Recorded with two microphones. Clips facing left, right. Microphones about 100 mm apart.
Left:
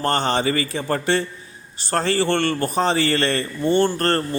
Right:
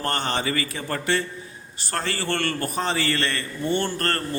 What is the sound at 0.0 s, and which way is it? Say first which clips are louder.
A man's voice: left 6 dB; 30° left (ahead or behind).